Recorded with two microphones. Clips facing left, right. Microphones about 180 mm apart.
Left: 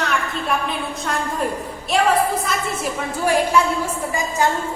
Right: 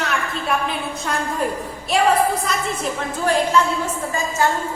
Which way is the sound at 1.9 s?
Centre (ahead or behind).